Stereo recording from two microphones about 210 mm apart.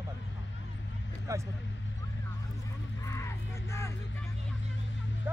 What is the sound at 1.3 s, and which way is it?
Speech, 15° right (ahead or behind).